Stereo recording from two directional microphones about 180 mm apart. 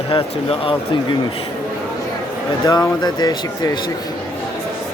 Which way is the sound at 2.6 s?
20° left (ahead or behind).